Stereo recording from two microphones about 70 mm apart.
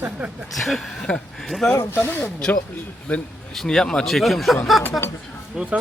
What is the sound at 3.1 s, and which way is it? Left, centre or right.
Speech, centre.